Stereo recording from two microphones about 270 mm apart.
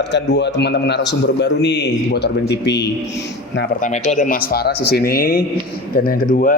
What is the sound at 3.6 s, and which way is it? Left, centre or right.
Speech, left.